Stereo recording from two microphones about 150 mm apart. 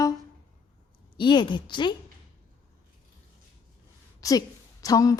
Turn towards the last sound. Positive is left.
turn(degrees=25)  # may be behind; listen again after turning